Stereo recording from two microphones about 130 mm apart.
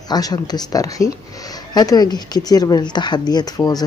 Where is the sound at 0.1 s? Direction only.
30° left (ahead or behind).